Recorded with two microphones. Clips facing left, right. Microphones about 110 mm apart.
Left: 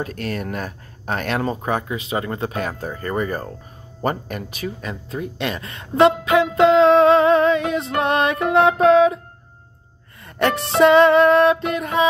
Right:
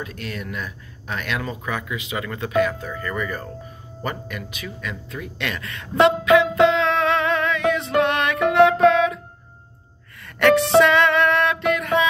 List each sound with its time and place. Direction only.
0.0 s speech: 45° left (ahead or behind); by 7.6 s 30° left (ahead or behind)
8.1 s music: 30° left (ahead or behind)
10.2 s music: 25° left (ahead or behind)